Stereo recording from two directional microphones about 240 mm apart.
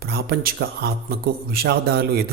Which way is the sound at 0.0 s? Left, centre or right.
Right.